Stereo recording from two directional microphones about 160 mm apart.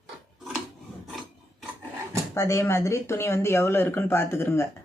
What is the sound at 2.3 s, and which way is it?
Speech, 15° left (ahead or behind).